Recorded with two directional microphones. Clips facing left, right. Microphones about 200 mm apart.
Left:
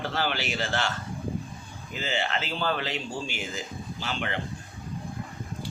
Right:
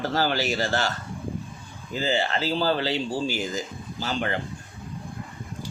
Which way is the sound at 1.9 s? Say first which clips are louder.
Right 5 dB; 35° right (ahead or behind).